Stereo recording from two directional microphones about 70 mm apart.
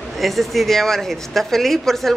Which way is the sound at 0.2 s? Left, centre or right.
Centre.